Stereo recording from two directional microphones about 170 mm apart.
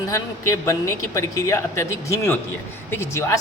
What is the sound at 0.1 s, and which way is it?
A woman's voice, 15° left (ahead or behind).